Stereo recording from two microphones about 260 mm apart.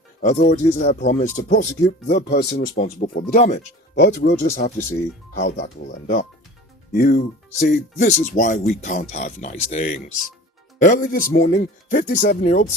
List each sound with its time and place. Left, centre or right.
0.2 s speech: left
3.9 s speech: left